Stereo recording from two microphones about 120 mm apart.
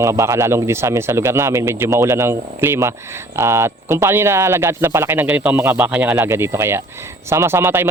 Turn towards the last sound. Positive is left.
turn(degrees=-20)  # may be behind; listen again after turning